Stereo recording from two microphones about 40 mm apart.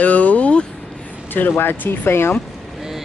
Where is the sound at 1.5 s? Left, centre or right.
Left.